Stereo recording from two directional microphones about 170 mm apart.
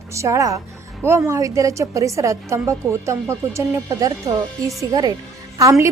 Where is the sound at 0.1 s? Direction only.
20° right (ahead or behind).